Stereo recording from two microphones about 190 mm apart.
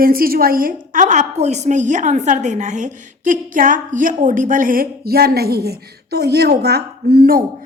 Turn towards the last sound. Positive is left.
turn(degrees=-50)  # may be behind; listen again after turning